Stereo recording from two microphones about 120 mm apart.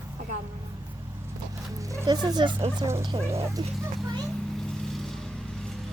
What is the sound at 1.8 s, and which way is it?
Speech, 25° right (ahead or behind).